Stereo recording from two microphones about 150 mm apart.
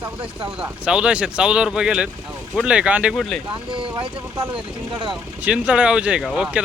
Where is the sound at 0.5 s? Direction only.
5° right (ahead or behind).